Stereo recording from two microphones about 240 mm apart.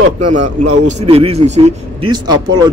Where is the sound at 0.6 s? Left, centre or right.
Right.